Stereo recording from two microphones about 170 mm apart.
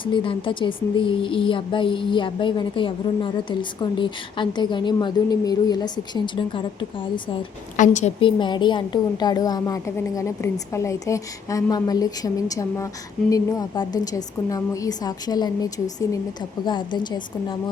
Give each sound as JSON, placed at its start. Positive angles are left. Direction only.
{"t": 0.0, "sound": "speech", "side_deg": 30}
{"t": 7.8, "sound": "a woman's voice", "side_deg": 45}
{"t": 8.2, "sound": "speech", "side_deg": 25}